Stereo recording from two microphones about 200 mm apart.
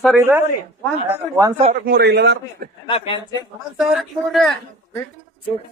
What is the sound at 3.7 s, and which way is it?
Speech, centre (ahead or behind).